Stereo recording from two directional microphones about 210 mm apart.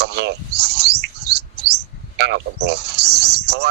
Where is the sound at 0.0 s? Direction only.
55° right (ahead or behind).